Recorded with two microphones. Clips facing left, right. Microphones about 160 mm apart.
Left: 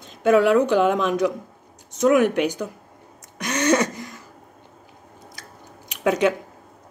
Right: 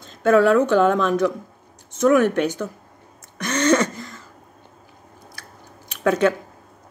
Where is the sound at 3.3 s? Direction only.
15° left (ahead or behind).